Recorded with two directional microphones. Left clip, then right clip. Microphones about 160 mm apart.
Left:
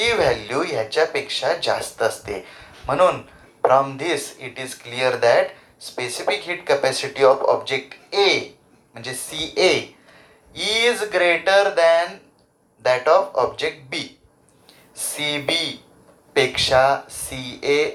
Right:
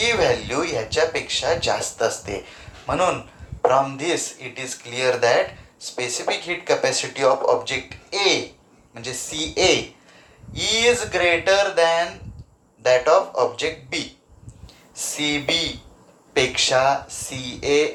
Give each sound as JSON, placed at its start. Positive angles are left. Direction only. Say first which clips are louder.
{"t": 0.0, "sound": "speech", "louder": "left 1 dB", "side_deg": 40}